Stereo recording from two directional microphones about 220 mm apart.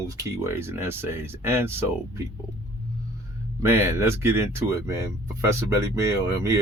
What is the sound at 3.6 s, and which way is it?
Speech, 10° right (ahead or behind).